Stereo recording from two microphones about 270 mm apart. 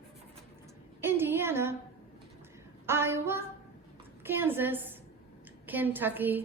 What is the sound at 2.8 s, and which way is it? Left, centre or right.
A woman's voice, centre.